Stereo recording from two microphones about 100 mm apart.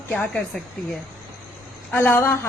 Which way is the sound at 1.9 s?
25° left (ahead or behind).